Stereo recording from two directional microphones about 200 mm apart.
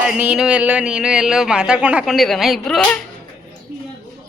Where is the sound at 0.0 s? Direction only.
5° right (ahead or behind).